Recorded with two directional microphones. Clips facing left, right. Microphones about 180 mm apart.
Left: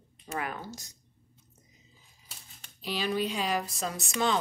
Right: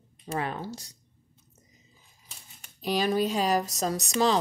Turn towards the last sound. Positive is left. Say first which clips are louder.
# right 5 dB
turn(degrees=-35)  # may be behind; listen again after turning